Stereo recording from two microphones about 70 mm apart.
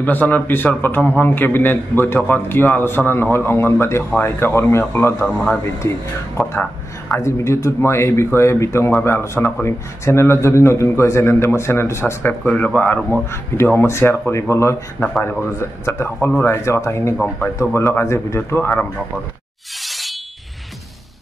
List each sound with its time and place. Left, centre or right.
0.0 s a man's voice: left
5.2 s speech: centre
7.2 s speech: left
12.2 s a man's voice: left
13.3 s speech: left
15.8 s a man's voice: left
19.8 s a sound: centre